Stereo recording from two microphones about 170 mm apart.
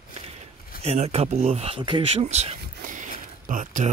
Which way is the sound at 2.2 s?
40° right (ahead or behind).